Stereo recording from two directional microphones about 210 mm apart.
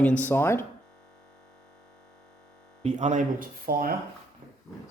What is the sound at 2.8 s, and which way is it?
Speech, 35° right (ahead or behind).